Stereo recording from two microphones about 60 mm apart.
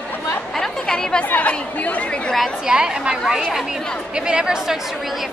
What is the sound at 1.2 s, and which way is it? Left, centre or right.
Speech, left.